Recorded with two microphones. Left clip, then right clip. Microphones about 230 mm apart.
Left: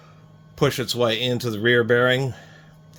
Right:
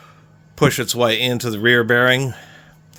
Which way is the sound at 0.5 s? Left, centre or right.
Right.